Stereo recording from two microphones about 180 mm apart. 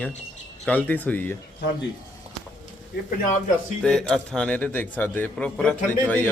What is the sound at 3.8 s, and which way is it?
Speech, 5° left (ahead or behind).